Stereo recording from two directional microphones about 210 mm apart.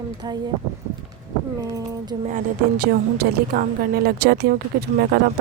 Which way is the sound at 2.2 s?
45° right (ahead or behind).